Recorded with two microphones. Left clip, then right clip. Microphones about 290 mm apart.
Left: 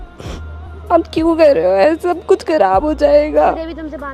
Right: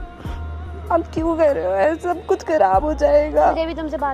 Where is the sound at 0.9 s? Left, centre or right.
Left.